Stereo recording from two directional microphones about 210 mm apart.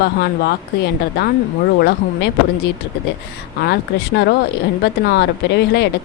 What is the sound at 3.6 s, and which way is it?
Speech, 50° left (ahead or behind).